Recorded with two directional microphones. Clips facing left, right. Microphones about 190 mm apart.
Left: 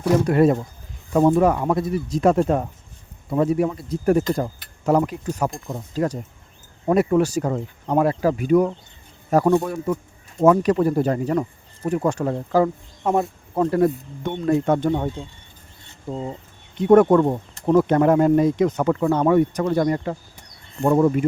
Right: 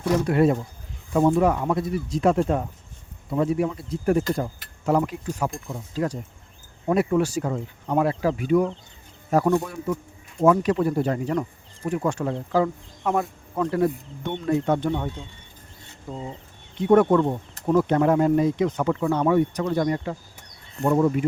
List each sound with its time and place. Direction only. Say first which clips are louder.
0.3 s speech: left 3 dB; 45° left (ahead or behind)
13.0 s a sound: left 3 dB; 25° left (ahead or behind)
13.7 s speech: left 3 dB; 45° left (ahead or behind)
16.8 s speech: left 4 dB; 50° left (ahead or behind)